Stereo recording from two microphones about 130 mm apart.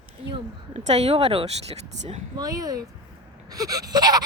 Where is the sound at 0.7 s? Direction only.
55° right (ahead or behind).